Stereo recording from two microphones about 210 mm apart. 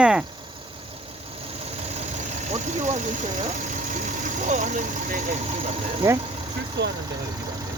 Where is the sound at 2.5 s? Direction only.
35° right (ahead or behind).